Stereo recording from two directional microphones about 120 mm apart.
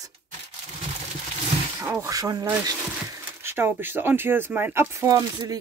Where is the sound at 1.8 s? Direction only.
25° right (ahead or behind).